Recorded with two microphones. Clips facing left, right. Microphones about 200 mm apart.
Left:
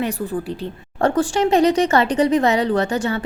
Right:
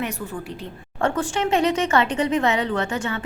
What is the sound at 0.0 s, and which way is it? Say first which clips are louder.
A woman's voice: left 6 dB; 35° left (ahead or behind).